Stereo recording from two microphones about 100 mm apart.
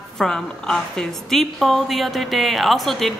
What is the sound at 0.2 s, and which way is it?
A woman's voice, 5° left (ahead or behind).